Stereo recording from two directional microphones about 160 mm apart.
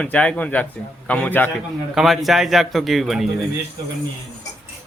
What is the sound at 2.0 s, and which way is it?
Speech, centre (ahead or behind).